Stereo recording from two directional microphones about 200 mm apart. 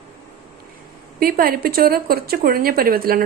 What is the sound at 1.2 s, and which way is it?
Speech, 45° right (ahead or behind).